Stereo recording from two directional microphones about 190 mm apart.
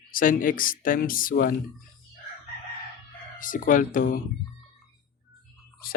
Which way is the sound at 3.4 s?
45° left (ahead or behind).